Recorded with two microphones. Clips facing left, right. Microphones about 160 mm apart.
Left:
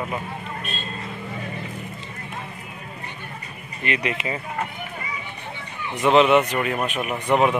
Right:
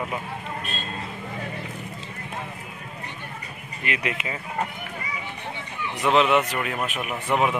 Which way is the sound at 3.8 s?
10° right (ahead or behind).